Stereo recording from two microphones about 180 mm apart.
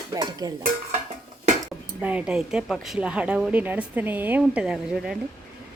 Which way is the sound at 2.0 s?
5° right (ahead or behind).